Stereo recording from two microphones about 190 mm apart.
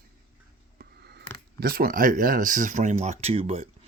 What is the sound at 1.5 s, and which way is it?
Speech, 50° right (ahead or behind).